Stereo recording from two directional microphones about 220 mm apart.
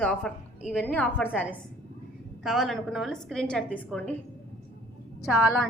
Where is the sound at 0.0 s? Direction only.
5° left (ahead or behind).